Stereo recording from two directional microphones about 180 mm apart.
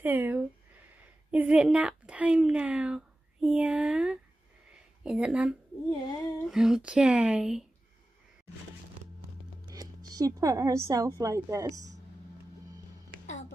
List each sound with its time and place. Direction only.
0.0 s a woman's voice: 10° right (ahead or behind)
9.7 s speech: 20° right (ahead or behind)